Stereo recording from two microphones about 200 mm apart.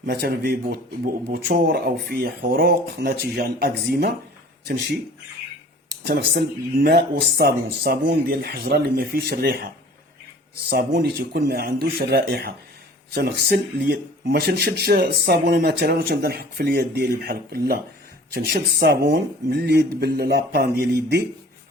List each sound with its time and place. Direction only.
0.0 s speech: 50° right (ahead or behind)
6.1 s speech: 55° right (ahead or behind)
10.7 s speech: 55° right (ahead or behind)